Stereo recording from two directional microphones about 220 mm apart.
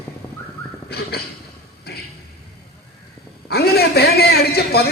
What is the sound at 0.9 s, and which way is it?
Speech, 45° left (ahead or behind).